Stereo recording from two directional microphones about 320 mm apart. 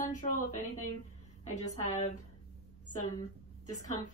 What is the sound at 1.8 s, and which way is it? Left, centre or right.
Speech, left.